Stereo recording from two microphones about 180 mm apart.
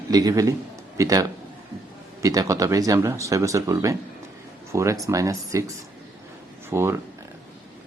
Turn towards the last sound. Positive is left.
turn(degrees=-15)  # may be behind; listen again after turning